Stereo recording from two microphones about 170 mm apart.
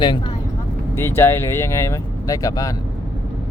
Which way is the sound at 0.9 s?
15° left (ahead or behind).